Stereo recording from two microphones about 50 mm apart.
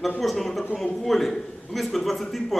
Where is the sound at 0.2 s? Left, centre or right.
Centre.